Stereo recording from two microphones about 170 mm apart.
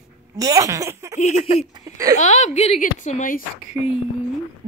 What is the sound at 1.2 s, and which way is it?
A woman's voice, 40° left (ahead or behind).